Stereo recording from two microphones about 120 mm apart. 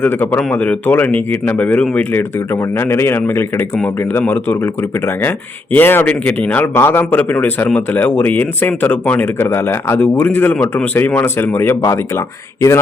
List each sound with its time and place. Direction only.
0.0 s a man's voice: 15° left (ahead or behind)